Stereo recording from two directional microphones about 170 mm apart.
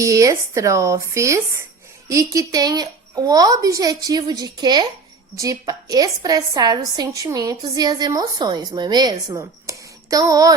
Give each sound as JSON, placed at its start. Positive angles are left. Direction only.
{"t": 0.0, "sound": "a woman's voice", "side_deg": -20}